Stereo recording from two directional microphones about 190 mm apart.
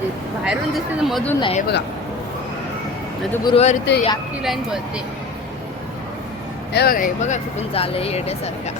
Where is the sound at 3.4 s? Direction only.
30° left (ahead or behind).